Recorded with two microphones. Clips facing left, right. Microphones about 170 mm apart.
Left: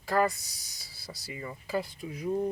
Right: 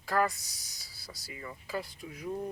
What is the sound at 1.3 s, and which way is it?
Speech, 15° left (ahead or behind).